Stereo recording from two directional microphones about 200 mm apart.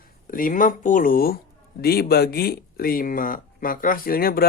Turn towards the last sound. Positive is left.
turn(degrees=50)  # may be behind; listen again after turning